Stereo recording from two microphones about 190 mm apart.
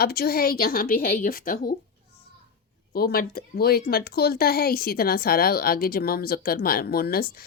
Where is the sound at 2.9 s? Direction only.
55° left (ahead or behind).